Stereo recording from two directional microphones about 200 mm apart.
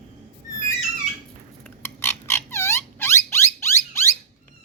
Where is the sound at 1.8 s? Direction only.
10° left (ahead or behind).